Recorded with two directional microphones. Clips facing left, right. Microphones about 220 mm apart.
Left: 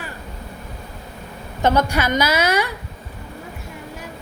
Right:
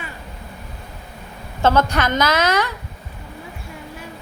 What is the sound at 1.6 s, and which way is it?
A woman's voice, 15° left (ahead or behind).